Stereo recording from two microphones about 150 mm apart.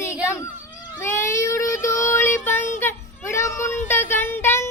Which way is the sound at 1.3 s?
20° left (ahead or behind).